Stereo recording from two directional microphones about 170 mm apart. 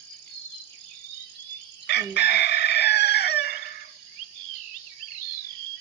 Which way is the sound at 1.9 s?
80° left.